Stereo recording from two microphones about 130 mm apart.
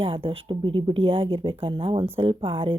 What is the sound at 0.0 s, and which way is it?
Speech, 45° right (ahead or behind).